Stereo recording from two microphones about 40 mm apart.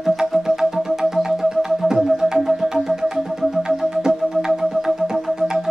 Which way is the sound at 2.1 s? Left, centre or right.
Centre.